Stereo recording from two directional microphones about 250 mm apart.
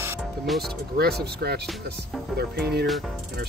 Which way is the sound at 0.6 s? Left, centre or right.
Right.